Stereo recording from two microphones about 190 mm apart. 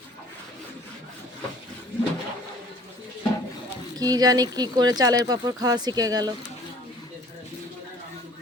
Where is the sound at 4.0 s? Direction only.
20° right (ahead or behind).